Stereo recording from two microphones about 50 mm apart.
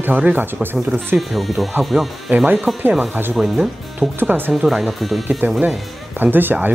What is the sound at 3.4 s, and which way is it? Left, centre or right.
Speech, centre.